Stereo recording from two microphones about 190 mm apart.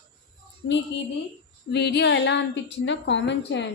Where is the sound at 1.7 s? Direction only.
60° left (ahead or behind).